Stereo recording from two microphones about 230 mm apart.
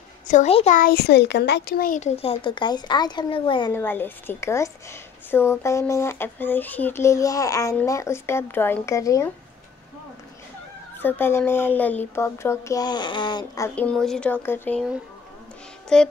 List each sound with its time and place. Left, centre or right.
0.3 s speech: left
3.7 s speech: centre
11.0 s speech: centre
13.7 s speech: centre
15.9 s speech: centre